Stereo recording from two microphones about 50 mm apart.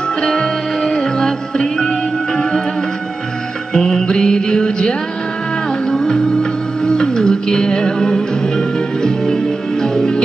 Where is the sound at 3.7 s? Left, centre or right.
Centre.